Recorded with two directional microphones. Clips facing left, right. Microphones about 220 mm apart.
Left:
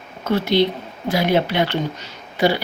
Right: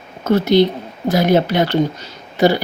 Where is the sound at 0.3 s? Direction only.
45° right (ahead or behind).